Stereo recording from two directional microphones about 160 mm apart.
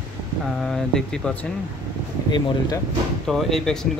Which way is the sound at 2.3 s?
25° left (ahead or behind).